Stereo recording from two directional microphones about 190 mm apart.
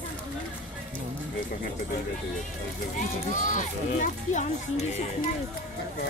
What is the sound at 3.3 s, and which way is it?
Speech, 45° left (ahead or behind).